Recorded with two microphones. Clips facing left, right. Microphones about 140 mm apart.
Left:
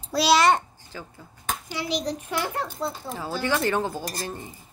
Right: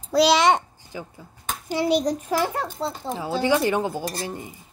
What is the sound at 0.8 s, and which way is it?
Speech, 15° right (ahead or behind).